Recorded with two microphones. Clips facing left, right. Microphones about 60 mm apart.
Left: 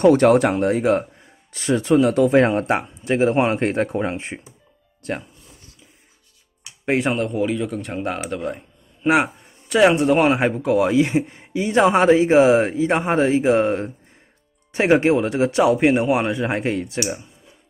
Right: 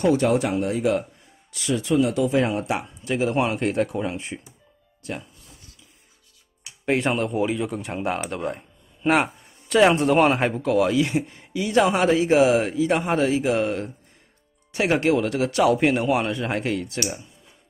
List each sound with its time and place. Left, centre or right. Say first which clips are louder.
0.0 s speech: left 6 dB; left
7.0 s speech: left 2 dB; centre